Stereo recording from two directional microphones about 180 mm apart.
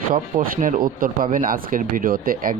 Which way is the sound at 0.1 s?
50° right (ahead or behind).